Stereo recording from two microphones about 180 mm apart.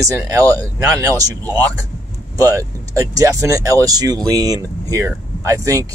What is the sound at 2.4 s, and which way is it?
Speech, 20° right (ahead or behind).